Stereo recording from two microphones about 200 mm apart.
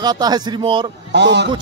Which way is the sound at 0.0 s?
20° right (ahead or behind).